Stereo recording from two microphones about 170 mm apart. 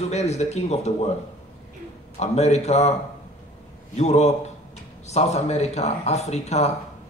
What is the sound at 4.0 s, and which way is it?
Speech, 40° left (ahead or behind).